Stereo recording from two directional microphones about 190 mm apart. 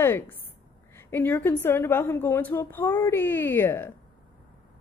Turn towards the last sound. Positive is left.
turn(degrees=10)  # may be behind; listen again after turning